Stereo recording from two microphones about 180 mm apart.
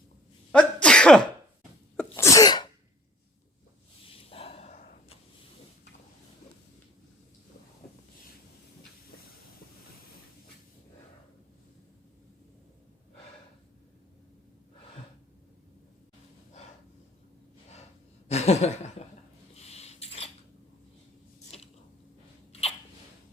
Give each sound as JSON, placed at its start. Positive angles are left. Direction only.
{"t": 0.5, "sound": "sneeze", "side_deg": 5}
{"t": 2.1, "sound": "sneeze", "side_deg": 15}
{"t": 4.0, "sound": "snort", "side_deg": 30}
{"t": 18.3, "sound": "chuckle", "side_deg": 35}
{"t": 19.5, "sound": "a sound", "side_deg": 35}